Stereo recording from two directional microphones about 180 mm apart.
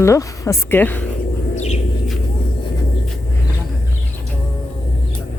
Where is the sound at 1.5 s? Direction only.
40° left (ahead or behind).